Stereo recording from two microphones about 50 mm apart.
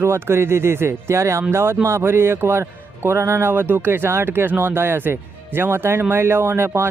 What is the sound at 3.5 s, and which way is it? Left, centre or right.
Speech, right.